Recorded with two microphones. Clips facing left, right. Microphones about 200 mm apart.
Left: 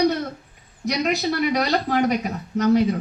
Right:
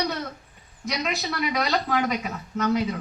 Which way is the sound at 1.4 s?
45° left (ahead or behind).